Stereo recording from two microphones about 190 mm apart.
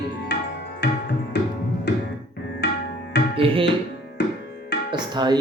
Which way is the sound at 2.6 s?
65° left (ahead or behind).